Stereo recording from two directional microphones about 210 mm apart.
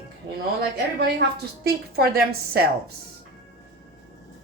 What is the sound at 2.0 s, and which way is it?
Speech, 45° right (ahead or behind).